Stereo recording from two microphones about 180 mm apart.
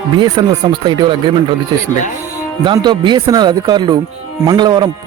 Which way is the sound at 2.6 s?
25° right (ahead or behind).